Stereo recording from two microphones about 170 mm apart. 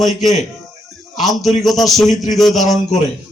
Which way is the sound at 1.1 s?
Centre (ahead or behind).